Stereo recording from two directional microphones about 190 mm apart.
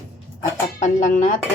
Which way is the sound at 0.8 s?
40° left (ahead or behind).